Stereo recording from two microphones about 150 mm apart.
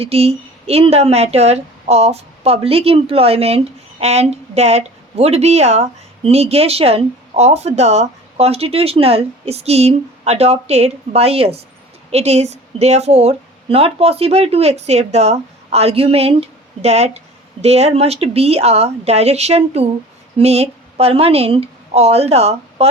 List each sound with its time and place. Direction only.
0.0 s a woman's voice: 40° right (ahead or behind)